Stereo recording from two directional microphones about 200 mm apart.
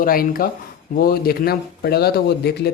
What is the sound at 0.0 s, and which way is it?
Speech, 45° left (ahead or behind).